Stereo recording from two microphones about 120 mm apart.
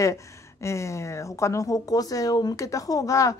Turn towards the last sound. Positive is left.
turn(degrees=25)  # may be behind; listen again after turning